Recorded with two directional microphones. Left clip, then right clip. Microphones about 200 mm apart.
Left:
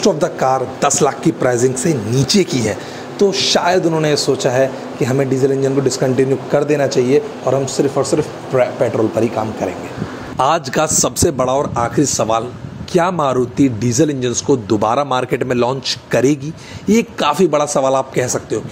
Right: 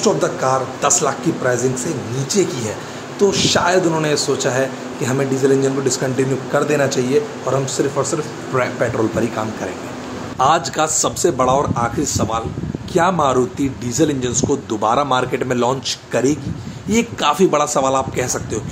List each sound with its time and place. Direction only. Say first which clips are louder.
0.0 s a man's voice: left 2 dB; 35° left (ahead or behind)
3.2 s a man's voice: left 1 dB; 20° left (ahead or behind)
10.3 s a man's voice: left 1 dB; 35° left (ahead or behind)
16.9 s a man's voice: left 2 dB; 25° left (ahead or behind)